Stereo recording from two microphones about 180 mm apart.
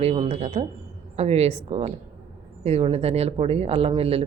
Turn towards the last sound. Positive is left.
turn(degrees=-30)  # may be behind; listen again after turning